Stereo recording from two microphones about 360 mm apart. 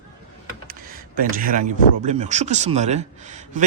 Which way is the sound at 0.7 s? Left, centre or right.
Right.